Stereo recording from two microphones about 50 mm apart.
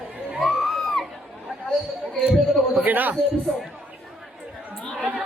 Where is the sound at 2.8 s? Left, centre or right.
Right.